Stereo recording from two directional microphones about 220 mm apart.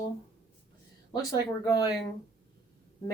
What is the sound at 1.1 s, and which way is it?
Speech, 15° left (ahead or behind).